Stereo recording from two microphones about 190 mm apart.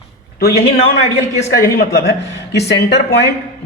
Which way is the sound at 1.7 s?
60° left (ahead or behind).